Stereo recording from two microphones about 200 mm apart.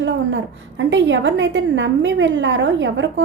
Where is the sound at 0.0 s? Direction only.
65° right (ahead or behind).